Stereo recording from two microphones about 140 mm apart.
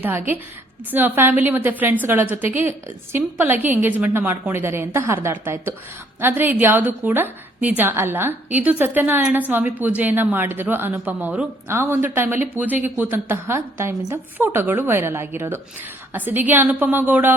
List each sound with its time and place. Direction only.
0.0 s a woman's voice: 15° right (ahead or behind)